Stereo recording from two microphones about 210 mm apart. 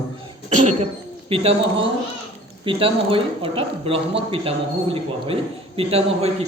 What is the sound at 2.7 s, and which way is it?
Speech, 25° right (ahead or behind).